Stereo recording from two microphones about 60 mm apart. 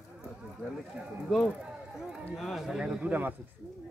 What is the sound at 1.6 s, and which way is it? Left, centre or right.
Run, centre.